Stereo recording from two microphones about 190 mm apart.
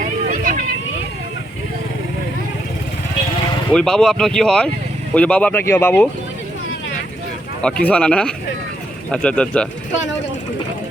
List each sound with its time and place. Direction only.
0.0 s a sound: 45° right (ahead or behind)
3.7 s speech: 5° left (ahead or behind)
7.6 s speech: 5° left (ahead or behind)